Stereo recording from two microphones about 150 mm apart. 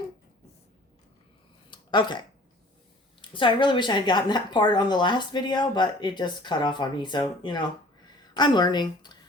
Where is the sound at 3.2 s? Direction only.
35° left (ahead or behind).